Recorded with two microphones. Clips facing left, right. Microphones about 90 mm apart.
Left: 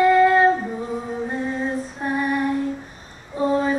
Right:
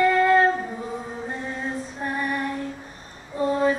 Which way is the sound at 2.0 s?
10° left (ahead or behind).